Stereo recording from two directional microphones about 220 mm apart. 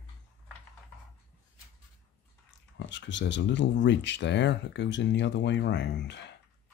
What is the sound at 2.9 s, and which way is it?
Speech, 55° left (ahead or behind).